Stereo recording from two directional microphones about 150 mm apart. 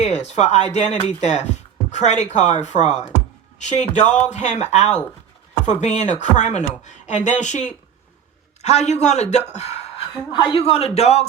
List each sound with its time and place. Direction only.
0.0 s speech: 50° left (ahead or behind)
10.3 s a man's voice: 35° left (ahead or behind)